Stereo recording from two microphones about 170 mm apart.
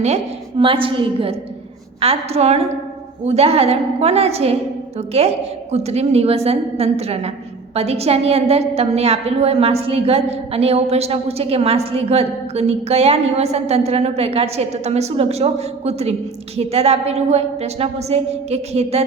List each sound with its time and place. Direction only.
0.6 s a woman's voice: 30° right (ahead or behind)